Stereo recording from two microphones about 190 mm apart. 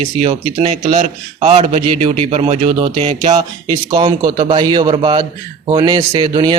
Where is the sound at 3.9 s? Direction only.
25° right (ahead or behind).